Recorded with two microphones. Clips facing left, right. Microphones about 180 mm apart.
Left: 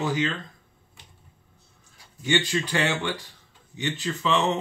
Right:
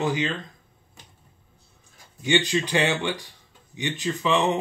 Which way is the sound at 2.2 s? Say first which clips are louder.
Right 2 dB; 15° right (ahead or behind).